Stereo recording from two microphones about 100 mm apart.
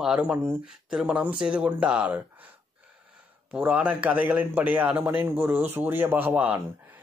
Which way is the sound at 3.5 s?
15° right (ahead or behind).